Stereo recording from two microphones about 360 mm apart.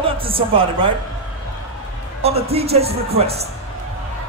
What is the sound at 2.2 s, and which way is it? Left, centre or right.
Speech, centre.